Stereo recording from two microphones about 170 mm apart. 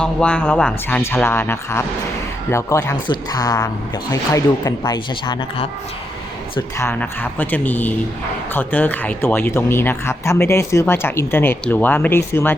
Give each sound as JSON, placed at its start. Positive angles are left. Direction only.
{"t": 0.0, "sound": "speech", "side_deg": 5}